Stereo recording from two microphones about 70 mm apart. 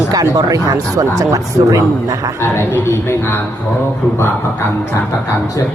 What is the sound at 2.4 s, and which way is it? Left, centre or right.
A man's voice, left.